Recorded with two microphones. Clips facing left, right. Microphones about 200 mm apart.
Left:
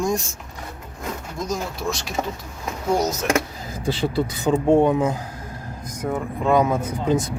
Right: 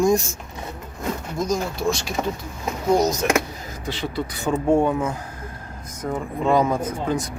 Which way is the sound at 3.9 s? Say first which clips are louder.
Left 5 dB; 30° left (ahead or behind).